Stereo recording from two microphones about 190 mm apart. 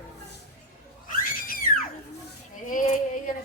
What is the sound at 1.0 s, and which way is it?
Screaming, 50° left (ahead or behind).